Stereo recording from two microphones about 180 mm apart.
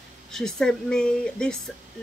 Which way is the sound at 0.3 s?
5° left (ahead or behind).